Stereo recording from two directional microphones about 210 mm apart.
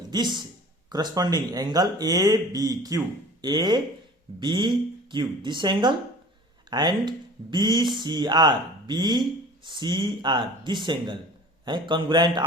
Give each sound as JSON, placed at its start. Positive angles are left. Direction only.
{"t": 0.1, "sound": "speech", "side_deg": -20}